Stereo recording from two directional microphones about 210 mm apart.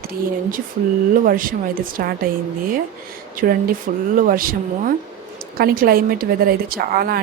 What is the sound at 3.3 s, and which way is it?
Speech, 45° right (ahead or behind).